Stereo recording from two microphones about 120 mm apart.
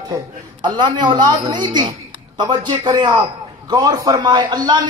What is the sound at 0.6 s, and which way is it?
A man's voice, 40° right (ahead or behind).